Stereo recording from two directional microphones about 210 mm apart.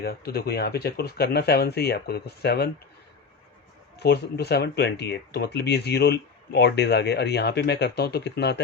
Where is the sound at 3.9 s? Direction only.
50° left (ahead or behind).